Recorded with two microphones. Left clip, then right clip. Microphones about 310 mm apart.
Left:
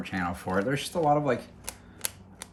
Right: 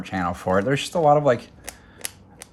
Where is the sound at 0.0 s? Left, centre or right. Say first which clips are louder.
Right 6 dB; centre.